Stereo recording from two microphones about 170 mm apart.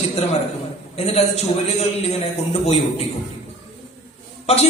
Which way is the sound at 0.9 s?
40° left (ahead or behind).